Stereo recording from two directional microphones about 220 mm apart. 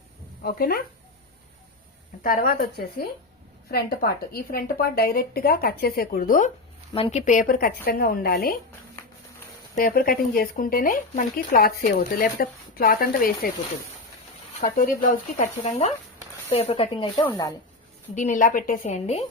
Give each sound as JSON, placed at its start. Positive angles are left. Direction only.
{"t": 0.4, "sound": "a woman's voice", "side_deg": 45}
{"t": 2.2, "sound": "speech", "side_deg": 40}
{"t": 3.7, "sound": "a woman's voice", "side_deg": 45}
{"t": 6.9, "sound": "speech", "side_deg": 30}
{"t": 9.7, "sound": "speech", "side_deg": 40}
{"t": 14.6, "sound": "speech", "side_deg": 40}
{"t": 18.1, "sound": "speech", "side_deg": 35}